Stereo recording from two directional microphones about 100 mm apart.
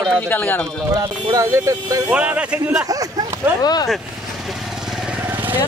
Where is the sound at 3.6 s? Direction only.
40° left (ahead or behind).